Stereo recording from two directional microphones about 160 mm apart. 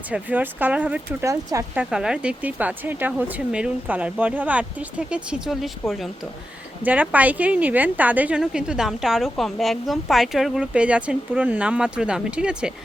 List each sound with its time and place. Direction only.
0.1 s a woman's voice: 10° right (ahead or behind)
1.2 s speech: 20° right (ahead or behind)
1.7 s a woman's voice: 5° right (ahead or behind)
6.8 s a woman's voice: 10° right (ahead or behind)